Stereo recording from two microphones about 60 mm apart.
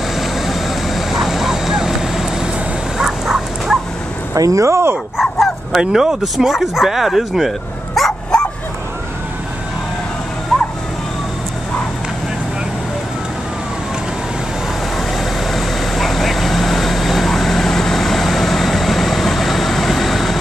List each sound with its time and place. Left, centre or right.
0.2 s vehicle: centre
3.0 s a sound: centre
4.4 s speech: right
5.1 s bow-wow: centre
5.8 s speech: centre
10.5 s vehicle: centre
15.1 s vehicle: centre